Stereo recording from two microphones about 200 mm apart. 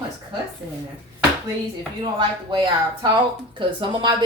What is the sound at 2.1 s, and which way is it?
Speech, 20° right (ahead or behind).